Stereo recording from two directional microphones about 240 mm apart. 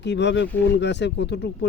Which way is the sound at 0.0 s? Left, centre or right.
Left.